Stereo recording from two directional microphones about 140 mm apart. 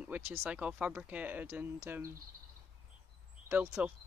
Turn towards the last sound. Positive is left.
turn(degrees=-15)  # may be behind; listen again after turning